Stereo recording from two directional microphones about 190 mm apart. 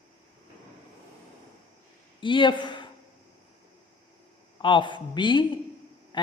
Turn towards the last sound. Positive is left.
turn(degrees=25)  # may be behind; listen again after turning